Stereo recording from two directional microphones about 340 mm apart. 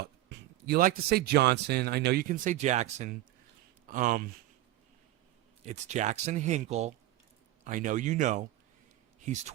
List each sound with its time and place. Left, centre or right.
0.0 s speech: right
5.6 s speech: centre